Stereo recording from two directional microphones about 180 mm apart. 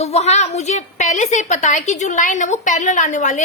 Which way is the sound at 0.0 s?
35° left (ahead or behind).